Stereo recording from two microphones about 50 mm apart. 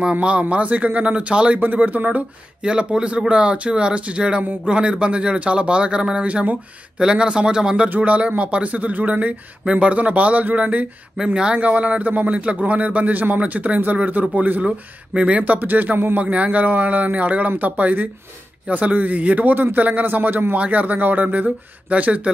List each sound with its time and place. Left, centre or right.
0.0 s speech: right
1.6 s a man's voice: right
2.6 s speech: centre
7.9 s a man's voice: right
15.1 s a man's voice: right
16.2 s a man's voice: right